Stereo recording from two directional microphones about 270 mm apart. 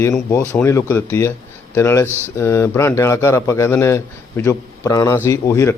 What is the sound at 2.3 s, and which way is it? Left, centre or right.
A man's voice, centre.